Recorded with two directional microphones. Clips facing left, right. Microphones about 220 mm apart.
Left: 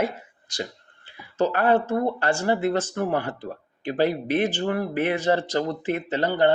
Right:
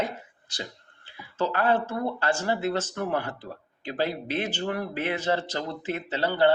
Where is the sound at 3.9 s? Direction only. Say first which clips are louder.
Left 6 dB; 15° left (ahead or behind).